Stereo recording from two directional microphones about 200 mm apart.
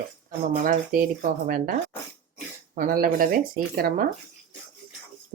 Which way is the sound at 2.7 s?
45° right (ahead or behind).